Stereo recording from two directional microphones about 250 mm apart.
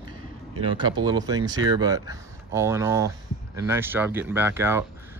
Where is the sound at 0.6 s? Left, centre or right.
Centre.